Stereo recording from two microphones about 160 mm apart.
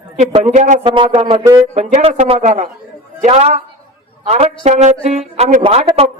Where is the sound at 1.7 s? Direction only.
45° right (ahead or behind).